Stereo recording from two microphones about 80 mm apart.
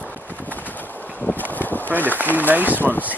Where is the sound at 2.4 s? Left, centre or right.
Right.